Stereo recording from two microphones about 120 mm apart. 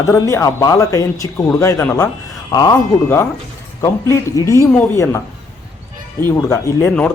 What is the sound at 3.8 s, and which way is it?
Speech, 25° left (ahead or behind).